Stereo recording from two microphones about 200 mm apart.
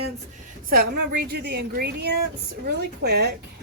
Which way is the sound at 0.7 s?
50° right (ahead or behind).